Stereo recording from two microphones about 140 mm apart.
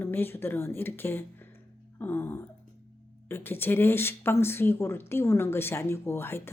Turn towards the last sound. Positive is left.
turn(degrees=15)  # may be behind; listen again after turning